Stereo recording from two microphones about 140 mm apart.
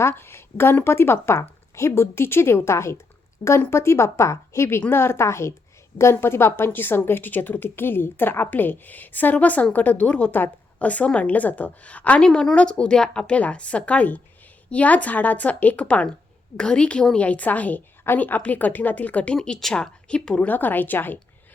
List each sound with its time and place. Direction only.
0.0 s a woman's voice: 15° left (ahead or behind)